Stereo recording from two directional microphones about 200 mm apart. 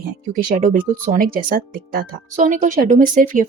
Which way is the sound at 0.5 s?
40° right (ahead or behind).